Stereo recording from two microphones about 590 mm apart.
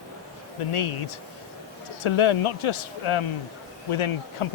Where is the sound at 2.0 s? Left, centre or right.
Left.